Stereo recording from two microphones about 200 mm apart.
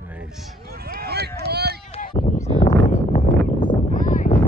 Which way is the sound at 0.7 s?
50° right (ahead or behind).